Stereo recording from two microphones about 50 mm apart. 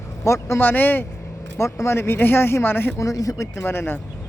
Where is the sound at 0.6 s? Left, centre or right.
Left.